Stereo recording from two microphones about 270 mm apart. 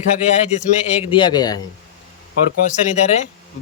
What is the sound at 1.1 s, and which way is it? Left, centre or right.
Speech, centre.